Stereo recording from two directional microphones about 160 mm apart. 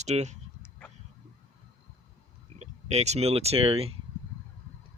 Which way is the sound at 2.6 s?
45° right (ahead or behind).